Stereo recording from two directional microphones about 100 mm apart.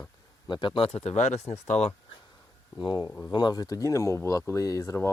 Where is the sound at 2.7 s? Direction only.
45° left (ahead or behind).